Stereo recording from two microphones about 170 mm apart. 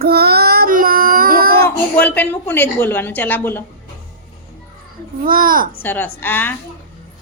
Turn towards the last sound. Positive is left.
turn(degrees=10)  # may be behind; listen again after turning